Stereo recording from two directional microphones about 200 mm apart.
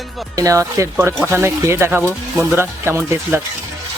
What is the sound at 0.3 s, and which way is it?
Speech, 15° right (ahead or behind).